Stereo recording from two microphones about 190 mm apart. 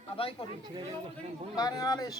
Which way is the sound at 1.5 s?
20° left (ahead or behind).